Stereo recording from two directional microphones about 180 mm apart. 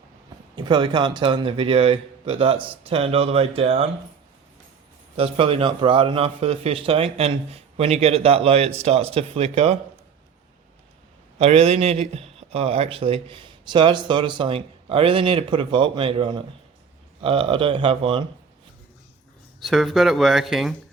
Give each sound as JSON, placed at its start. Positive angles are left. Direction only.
{"t": 0.5, "sound": "speech", "side_deg": -25}
{"t": 5.1, "sound": "speech", "side_deg": -30}
{"t": 11.3, "sound": "speech", "side_deg": -35}
{"t": 19.6, "sound": "speech", "side_deg": 0}